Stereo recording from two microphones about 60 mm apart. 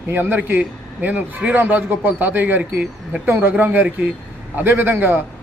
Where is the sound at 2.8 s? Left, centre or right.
Centre.